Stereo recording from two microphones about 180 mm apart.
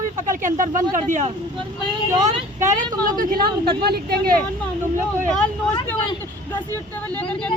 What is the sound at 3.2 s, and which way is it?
Speech, 50° right (ahead or behind).